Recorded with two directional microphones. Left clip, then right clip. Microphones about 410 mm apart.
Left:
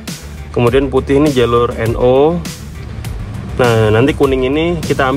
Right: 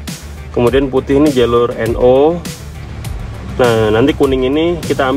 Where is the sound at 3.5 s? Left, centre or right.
Left.